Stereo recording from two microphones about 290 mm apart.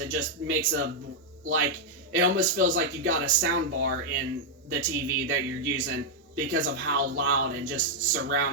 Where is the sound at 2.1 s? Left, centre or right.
Right.